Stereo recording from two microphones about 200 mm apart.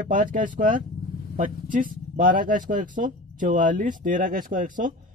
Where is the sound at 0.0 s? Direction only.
40° right (ahead or behind).